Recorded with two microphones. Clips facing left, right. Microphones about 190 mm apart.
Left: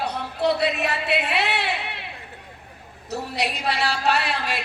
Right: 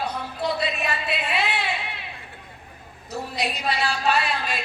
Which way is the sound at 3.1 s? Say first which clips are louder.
Left 1 dB; 70° left (ahead or behind).